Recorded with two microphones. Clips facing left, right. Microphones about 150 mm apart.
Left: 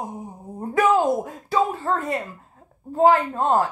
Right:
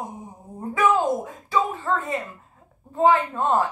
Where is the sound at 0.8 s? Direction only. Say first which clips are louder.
Left 2 dB; 35° left (ahead or behind).